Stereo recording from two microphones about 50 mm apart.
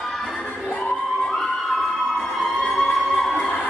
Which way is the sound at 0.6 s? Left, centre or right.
Left.